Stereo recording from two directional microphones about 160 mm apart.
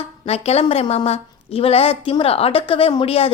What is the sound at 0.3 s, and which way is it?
A woman's voice, 40° left (ahead or behind).